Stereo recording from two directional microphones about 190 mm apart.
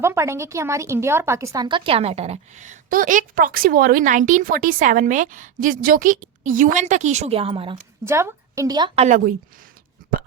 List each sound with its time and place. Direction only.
0.0 s speech: 15° right (ahead or behind)
8.0 s a woman's voice: 15° right (ahead or behind)
9.0 s speech: 40° right (ahead or behind)